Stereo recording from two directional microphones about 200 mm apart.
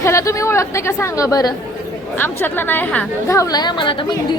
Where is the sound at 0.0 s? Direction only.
15° left (ahead or behind).